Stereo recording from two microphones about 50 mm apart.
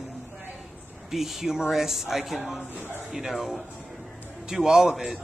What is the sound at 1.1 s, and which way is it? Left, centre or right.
Speech, centre.